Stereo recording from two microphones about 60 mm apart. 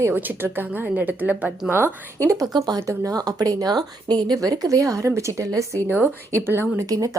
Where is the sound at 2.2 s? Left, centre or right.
Right.